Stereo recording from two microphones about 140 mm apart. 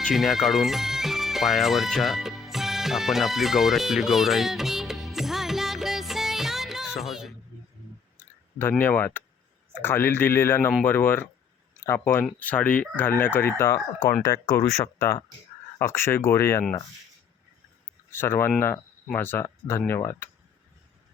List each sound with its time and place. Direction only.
0.0 s music: centre (ahead or behind)
8.8 s speech: 15° left (ahead or behind)
18.1 s speech: 15° left (ahead or behind)